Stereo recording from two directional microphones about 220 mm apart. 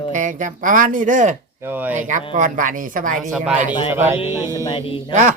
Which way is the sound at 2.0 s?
35° right (ahead or behind).